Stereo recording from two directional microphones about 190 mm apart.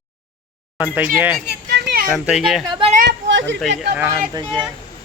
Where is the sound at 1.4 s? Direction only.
60° right (ahead or behind).